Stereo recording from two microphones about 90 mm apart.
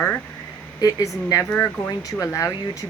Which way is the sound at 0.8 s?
40° left (ahead or behind).